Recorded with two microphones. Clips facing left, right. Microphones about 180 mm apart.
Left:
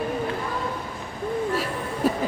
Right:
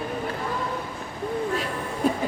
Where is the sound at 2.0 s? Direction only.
5° left (ahead or behind).